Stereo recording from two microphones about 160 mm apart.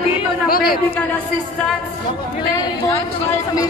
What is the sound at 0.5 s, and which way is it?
Speech, 70° left (ahead or behind).